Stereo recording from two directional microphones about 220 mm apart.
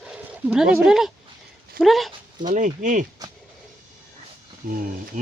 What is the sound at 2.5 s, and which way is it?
Speech, 35° right (ahead or behind).